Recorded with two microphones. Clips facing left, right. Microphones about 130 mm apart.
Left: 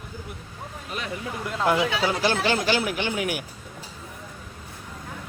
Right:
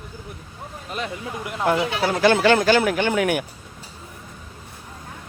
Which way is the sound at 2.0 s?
60° right (ahead or behind).